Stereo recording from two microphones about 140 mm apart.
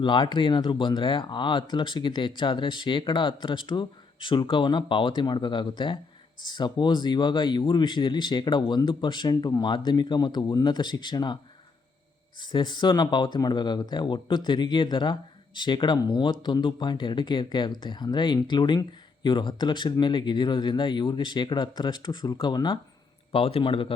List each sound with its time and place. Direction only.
0.0 s speech: 35° left (ahead or behind)
12.4 s speech: 30° left (ahead or behind)